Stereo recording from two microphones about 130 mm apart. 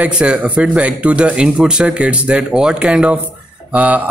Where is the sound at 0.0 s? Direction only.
5° right (ahead or behind).